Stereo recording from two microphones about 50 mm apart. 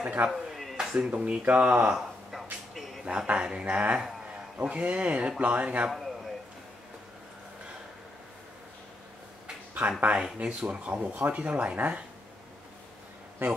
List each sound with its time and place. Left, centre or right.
0.0 s speech: right
0.5 s a sound: centre
0.7 s a sound: centre
1.1 s speech: right
3.1 s speech: right
5.9 s speech: centre
9.8 s speech: right
13.4 s speech: right